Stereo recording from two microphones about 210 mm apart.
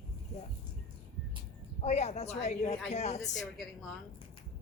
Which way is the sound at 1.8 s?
30° left (ahead or behind).